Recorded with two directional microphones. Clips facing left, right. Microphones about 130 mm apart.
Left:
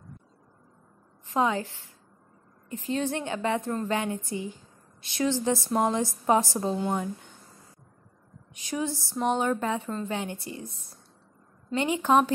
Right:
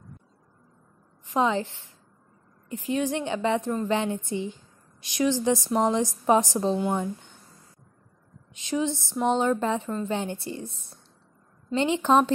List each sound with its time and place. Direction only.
1.2 s a woman's voice: 20° right (ahead or behind)
8.5 s a woman's voice: 20° right (ahead or behind)
12.0 s speech: 10° left (ahead or behind)